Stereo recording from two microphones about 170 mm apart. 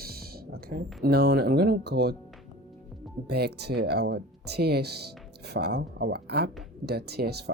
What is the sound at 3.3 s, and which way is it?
Speech, 70° right (ahead or behind).